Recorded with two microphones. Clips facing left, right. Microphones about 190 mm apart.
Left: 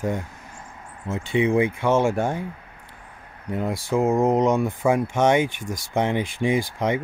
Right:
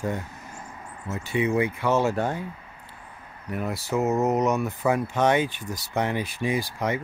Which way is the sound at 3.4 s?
20° left (ahead or behind).